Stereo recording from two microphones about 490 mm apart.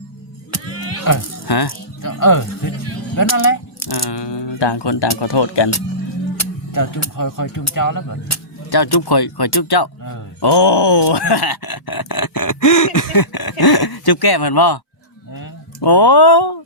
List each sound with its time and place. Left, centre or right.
0.5 s music: left
3.2 s speech: left
6.4 s speech: left
10.5 s groan: left
15.3 s a sound: left